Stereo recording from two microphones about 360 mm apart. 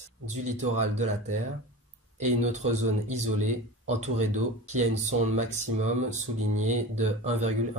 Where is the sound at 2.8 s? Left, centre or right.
Right.